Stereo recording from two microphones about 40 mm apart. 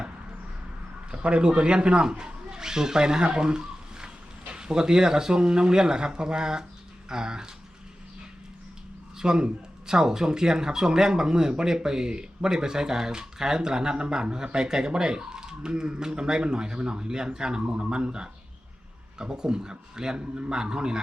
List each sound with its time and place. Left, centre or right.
1.1 s speech: right
9.1 s speech: centre